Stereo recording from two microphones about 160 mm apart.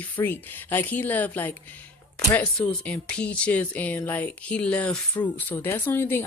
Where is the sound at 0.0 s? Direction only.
10° left (ahead or behind).